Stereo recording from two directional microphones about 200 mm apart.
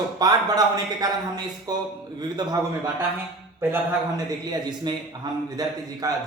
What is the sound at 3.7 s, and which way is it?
A man's voice, 20° right (ahead or behind).